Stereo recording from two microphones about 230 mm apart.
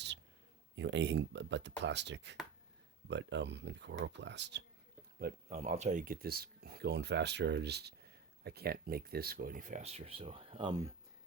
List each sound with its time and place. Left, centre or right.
0.8 s speech: right
5.2 s speech: right